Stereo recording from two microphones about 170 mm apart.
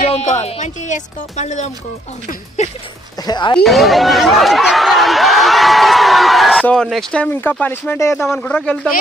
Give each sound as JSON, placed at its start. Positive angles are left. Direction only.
{"t": 0.0, "sound": "speech", "side_deg": 40}
{"t": 3.3, "sound": "speech", "side_deg": 25}
{"t": 3.5, "sound": "speech", "side_deg": 0}